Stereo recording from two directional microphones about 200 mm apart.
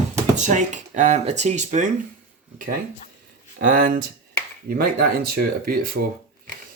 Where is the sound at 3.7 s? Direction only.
45° right (ahead or behind).